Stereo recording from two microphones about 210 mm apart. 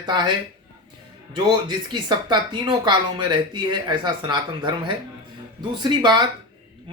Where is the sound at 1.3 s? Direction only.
20° right (ahead or behind).